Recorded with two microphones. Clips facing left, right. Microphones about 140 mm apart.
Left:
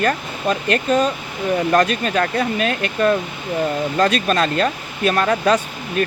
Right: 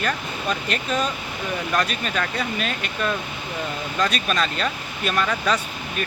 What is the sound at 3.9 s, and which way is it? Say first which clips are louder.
Speech: left 4 dB; 35° left (ahead or behind).